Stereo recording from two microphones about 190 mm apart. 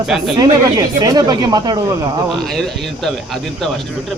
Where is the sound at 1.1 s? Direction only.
20° right (ahead or behind).